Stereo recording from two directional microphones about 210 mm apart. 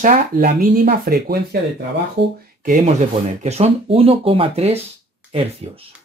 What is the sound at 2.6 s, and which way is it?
Speech, 40° right (ahead or behind).